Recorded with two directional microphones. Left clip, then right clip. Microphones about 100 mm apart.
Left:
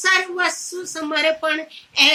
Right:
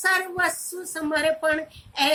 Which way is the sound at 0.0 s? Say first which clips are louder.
Left 4 dB; 30° right (ahead or behind).